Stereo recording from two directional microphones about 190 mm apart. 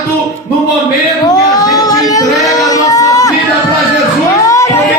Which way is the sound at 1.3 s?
20° left (ahead or behind).